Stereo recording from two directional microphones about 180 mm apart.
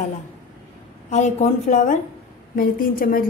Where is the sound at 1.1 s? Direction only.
40° left (ahead or behind).